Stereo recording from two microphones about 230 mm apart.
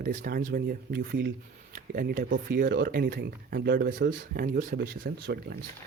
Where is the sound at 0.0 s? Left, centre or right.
Right.